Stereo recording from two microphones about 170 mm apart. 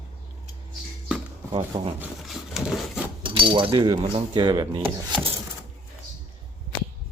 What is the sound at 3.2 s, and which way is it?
Speech, 30° right (ahead or behind).